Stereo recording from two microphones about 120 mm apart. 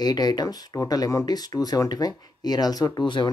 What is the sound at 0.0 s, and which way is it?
Speech, 35° left (ahead or behind).